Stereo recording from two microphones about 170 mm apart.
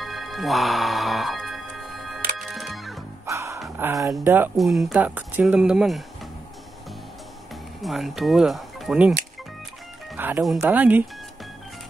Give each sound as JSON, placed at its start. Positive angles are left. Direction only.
{"t": 0.0, "sound": "music", "side_deg": 0}
{"t": 3.3, "sound": "dog", "side_deg": -15}
{"t": 4.6, "sound": "speech", "side_deg": 0}
{"t": 7.8, "sound": "speech", "side_deg": 0}
{"t": 10.1, "sound": "music", "side_deg": -10}
{"t": 10.6, "sound": "speech", "side_deg": -10}